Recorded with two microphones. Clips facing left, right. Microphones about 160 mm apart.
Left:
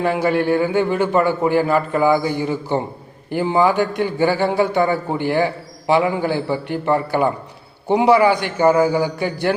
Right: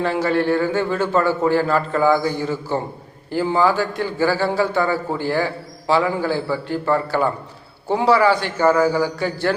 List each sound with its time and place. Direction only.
0.0 s a man's voice: 15° left (ahead or behind)